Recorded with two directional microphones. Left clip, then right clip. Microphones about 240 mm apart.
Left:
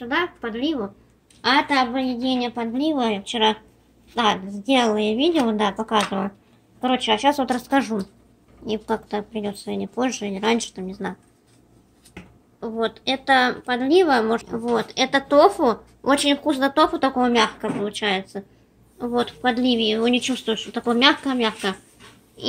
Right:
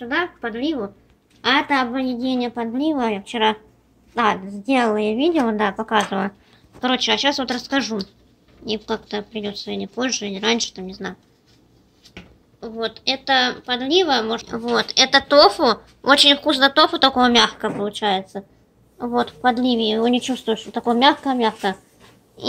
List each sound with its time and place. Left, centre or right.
0.0 s a woman's voice: centre
12.5 s a woman's voice: centre
19.6 s a woman's voice: right
19.9 s speech: centre